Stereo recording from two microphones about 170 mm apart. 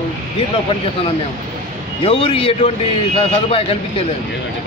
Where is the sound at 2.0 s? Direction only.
35° left (ahead or behind).